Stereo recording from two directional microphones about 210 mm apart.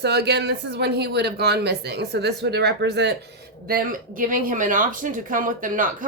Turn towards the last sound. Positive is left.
turn(degrees=-40)  # may be behind; listen again after turning